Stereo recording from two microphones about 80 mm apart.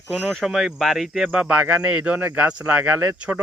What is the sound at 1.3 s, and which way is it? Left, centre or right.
Speech, centre.